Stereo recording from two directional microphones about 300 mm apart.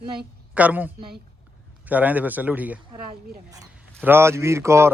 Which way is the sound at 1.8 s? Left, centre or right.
Centre.